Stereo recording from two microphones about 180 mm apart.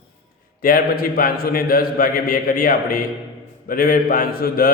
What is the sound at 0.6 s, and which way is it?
A man's voice, 55° left (ahead or behind).